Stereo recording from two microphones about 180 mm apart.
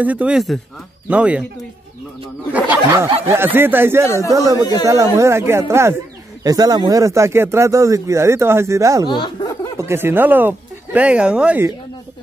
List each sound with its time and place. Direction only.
0.0 s speech: 10° right (ahead or behind)
2.5 s a man's voice: 15° right (ahead or behind)
9.0 s speech: 25° left (ahead or behind)
9.8 s speech: 15° right (ahead or behind)